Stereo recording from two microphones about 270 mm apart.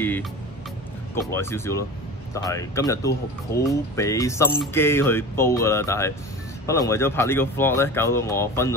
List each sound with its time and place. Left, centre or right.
0.0 s speech: centre